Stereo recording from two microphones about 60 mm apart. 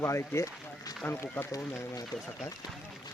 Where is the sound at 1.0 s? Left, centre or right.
Left.